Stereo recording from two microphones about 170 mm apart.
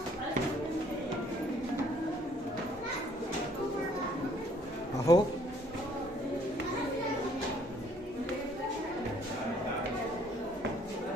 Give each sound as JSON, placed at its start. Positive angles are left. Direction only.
{"t": 5.1, "sound": "speech", "side_deg": 20}